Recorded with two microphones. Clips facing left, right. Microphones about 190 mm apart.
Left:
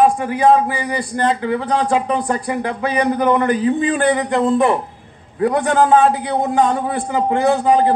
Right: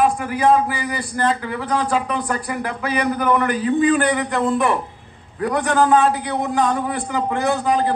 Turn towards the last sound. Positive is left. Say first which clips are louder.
# left 5 dB
turn(degrees=25)  # may be behind; listen again after turning